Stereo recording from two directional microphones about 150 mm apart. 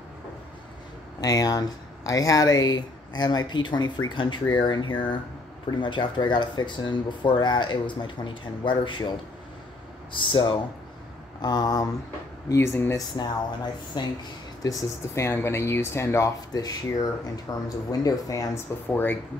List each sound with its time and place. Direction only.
1.2 s speech: 25° left (ahead or behind)
10.1 s speech: 35° left (ahead or behind); by 13.0 s 15° left (ahead or behind)
14.0 s speech: 30° left (ahead or behind); by 19.1 s 15° left (ahead or behind)